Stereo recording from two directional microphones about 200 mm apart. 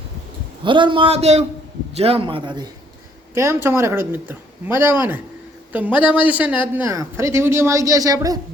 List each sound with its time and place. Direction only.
0.6 s a man's voice: 25° right (ahead or behind)
3.3 s speech: 15° right (ahead or behind)